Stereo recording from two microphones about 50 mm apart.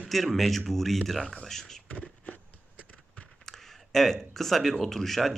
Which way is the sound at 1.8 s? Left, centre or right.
Left.